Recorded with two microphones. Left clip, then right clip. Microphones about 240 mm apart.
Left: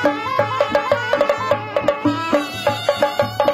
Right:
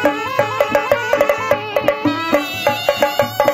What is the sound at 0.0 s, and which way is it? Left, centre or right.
Music, right.